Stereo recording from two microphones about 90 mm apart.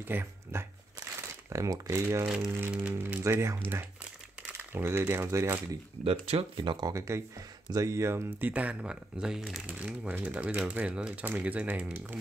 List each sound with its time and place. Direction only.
0.1 s speech: 25° right (ahead or behind)
1.5 s speech: 35° right (ahead or behind)
2.2 s speech: 5° right (ahead or behind)
2.7 s speech: 25° right (ahead or behind)
6.0 s speech: 80° right
6.9 s speech: 35° right (ahead or behind); by 9.4 s 10° right (ahead or behind)
9.7 s speech: 20° right (ahead or behind)